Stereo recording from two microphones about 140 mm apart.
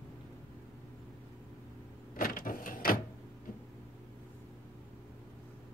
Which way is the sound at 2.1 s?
80° left.